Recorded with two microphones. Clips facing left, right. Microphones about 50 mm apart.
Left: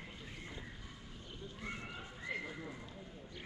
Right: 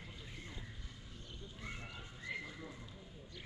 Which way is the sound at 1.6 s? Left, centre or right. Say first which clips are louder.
Left 3 dB; left.